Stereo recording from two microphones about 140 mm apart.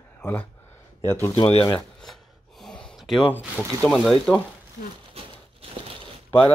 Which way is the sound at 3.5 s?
5° left (ahead or behind).